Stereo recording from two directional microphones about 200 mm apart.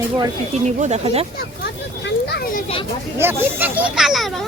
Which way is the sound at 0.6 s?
35° right (ahead or behind).